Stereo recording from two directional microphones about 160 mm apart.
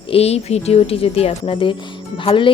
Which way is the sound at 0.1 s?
40° left (ahead or behind).